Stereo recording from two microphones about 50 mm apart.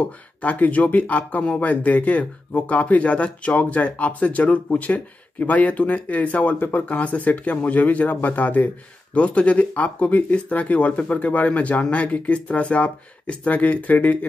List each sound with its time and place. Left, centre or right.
0.4 s speech: left